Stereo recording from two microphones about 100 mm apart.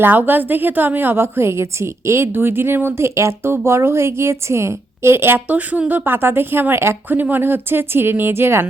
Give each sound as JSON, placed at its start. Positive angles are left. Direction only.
{"t": 0.0, "sound": "a woman's voice", "side_deg": -20}